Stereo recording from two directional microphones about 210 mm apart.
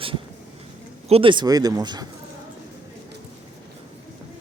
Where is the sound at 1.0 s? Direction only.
25° right (ahead or behind).